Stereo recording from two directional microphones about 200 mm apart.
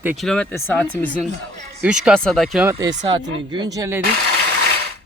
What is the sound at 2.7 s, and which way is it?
A woman's voice, 20° right (ahead or behind).